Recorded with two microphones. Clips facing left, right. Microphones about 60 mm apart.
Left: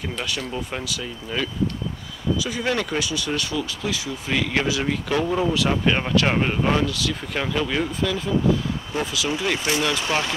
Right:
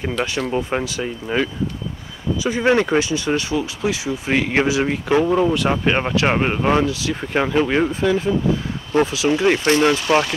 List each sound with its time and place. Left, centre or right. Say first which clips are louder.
0.5 s speech: right 7 dB; right
5.3 s speech: right 5 dB; centre
5.7 s speech: right 3 dB; right
9.7 s speech: right 8 dB; right
9.9 s speech: right 6 dB; right